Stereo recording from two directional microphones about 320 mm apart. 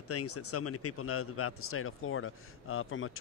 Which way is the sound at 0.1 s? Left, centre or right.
Left.